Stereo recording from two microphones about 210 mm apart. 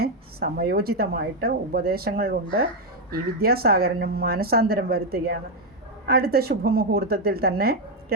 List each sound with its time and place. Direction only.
0.0 s speech: 45° right (ahead or behind)